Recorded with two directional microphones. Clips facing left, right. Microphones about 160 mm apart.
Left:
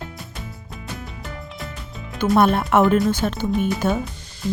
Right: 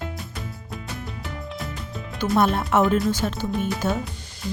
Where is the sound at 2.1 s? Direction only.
60° left (ahead or behind).